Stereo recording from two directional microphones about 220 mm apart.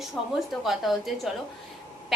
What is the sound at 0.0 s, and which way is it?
A woman's voice, centre (ahead or behind).